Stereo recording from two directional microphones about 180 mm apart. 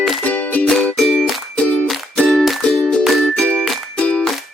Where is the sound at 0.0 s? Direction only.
5° left (ahead or behind).